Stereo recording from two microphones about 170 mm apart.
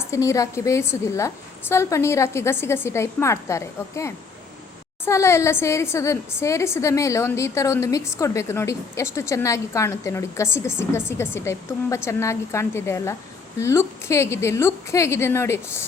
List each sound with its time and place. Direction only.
0.0 s a woman's voice: 20° left (ahead or behind)